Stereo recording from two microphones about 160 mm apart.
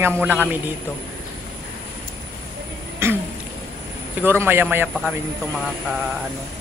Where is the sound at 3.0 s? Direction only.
15° right (ahead or behind).